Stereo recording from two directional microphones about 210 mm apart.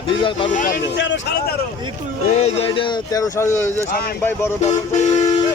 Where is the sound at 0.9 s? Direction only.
60° left (ahead or behind).